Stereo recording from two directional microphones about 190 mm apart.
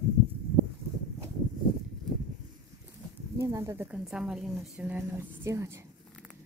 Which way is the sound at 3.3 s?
15° right (ahead or behind).